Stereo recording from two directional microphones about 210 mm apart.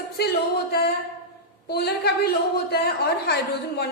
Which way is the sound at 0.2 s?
50° left (ahead or behind).